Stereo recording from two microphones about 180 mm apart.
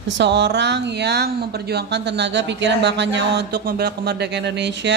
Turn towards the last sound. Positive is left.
turn(degrees=-75)  # may be behind; listen again after turning